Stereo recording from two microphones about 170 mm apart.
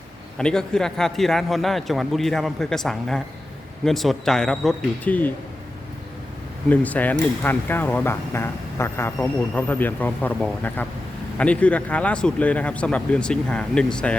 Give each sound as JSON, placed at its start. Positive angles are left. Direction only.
{"t": 0.3, "sound": "a man's voice", "side_deg": 5}
{"t": 6.7, "sound": "speech", "side_deg": 10}